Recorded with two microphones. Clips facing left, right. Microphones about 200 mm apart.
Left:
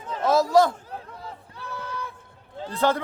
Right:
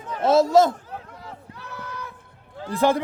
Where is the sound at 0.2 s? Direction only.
25° right (ahead or behind).